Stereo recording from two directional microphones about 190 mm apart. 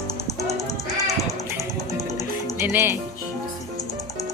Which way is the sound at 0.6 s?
15° left (ahead or behind).